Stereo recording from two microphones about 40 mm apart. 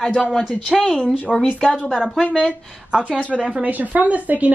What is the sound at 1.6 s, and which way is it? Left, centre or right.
Speech, left.